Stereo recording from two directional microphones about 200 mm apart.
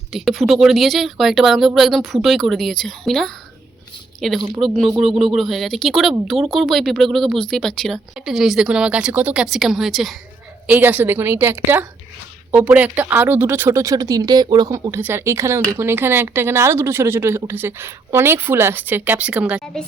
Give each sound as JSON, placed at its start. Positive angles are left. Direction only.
{"t": 0.1, "sound": "speech", "side_deg": 0}
{"t": 4.4, "sound": "speech", "side_deg": -15}
{"t": 4.6, "sound": "speech", "side_deg": 5}